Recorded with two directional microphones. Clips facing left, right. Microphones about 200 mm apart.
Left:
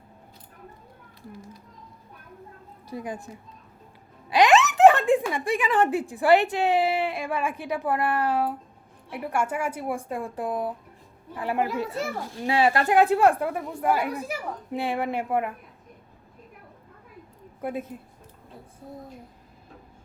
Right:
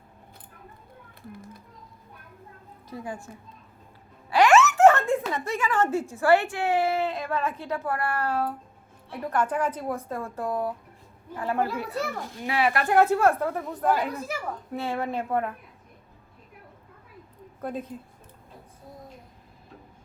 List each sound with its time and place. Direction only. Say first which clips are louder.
2.8 s a woman's voice: left 2 dB; 15° left (ahead or behind)
4.3 s speech: even; 20° left (ahead or behind)
12.9 s speech: even; 15° left (ahead or behind)
17.6 s speech: left 2 dB; 10° left (ahead or behind)